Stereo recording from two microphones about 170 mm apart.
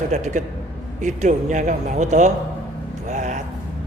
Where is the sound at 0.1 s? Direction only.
45° right (ahead or behind).